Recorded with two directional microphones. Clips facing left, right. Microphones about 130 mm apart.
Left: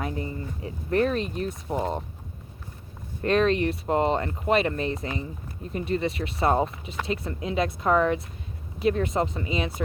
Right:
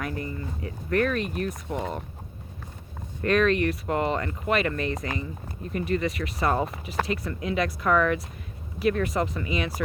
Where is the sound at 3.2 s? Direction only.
30° left (ahead or behind).